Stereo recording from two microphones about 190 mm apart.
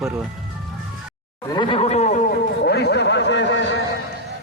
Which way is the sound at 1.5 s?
25° left (ahead or behind).